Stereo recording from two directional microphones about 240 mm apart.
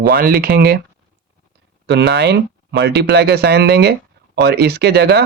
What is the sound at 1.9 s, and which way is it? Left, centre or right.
Speech, right.